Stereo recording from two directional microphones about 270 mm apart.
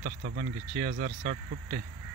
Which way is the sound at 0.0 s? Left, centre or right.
Right.